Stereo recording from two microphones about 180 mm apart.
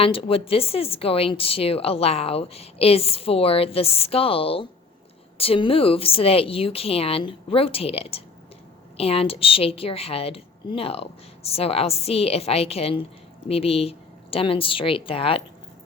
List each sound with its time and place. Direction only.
0.0 s a woman's voice: 30° left (ahead or behind)